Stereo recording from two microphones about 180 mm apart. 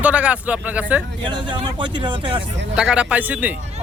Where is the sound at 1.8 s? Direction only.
25° right (ahead or behind).